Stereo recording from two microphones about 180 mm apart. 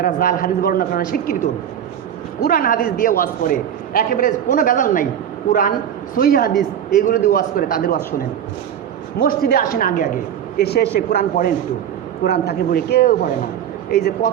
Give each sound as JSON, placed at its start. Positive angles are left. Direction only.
{"t": 0.0, "sound": "a man's voice", "side_deg": 50}
{"t": 2.4, "sound": "a man's voice", "side_deg": 55}
{"t": 9.1, "sound": "a man's voice", "side_deg": 55}